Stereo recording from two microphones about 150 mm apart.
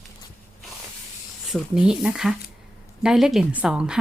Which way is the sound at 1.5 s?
5° right (ahead or behind).